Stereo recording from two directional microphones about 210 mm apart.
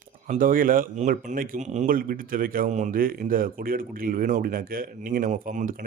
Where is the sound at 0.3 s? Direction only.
40° right (ahead or behind).